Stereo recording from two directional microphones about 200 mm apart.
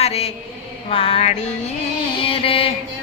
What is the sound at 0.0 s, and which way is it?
Speech, 30° left (ahead or behind).